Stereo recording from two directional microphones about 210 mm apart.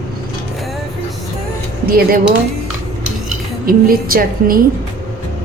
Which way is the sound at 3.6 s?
45° right (ahead or behind).